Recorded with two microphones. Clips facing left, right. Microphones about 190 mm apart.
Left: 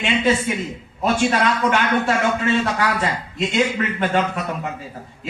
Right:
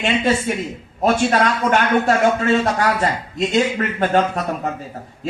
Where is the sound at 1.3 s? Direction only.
45° right (ahead or behind).